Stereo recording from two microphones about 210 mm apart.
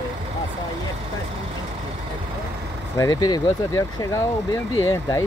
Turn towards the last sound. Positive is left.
turn(degrees=15)  # may be behind; listen again after turning